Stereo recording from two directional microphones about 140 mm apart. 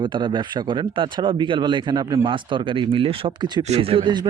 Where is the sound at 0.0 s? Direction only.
35° right (ahead or behind).